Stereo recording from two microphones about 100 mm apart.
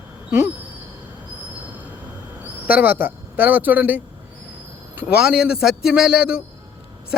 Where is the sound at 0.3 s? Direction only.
25° right (ahead or behind).